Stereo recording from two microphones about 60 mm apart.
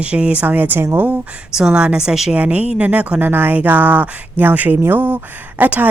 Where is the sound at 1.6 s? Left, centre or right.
Centre.